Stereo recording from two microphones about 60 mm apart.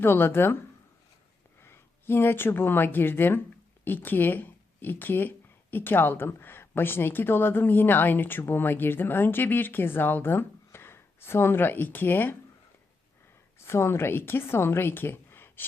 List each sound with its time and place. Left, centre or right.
0.0 s a woman's voice: left
1.6 s a woman's voice: left
13.6 s a woman's voice: left